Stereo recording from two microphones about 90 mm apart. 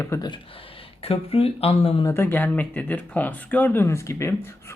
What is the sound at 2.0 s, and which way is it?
Speech, 25° left (ahead or behind).